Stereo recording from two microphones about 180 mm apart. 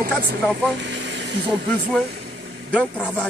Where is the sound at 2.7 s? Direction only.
5° left (ahead or behind).